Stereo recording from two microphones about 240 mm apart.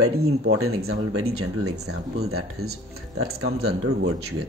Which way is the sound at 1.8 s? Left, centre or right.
Right.